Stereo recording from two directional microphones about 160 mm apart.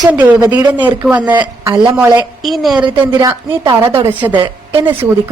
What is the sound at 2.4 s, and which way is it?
Speech, centre (ahead or behind).